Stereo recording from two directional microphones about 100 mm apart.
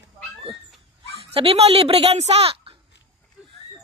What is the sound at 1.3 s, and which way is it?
Speech, 90° right.